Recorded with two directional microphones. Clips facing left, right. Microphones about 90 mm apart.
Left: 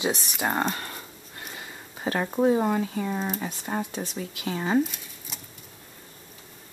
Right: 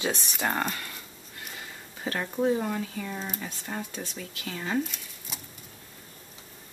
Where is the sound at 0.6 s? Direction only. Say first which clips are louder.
Left 4 dB; 30° left (ahead or behind).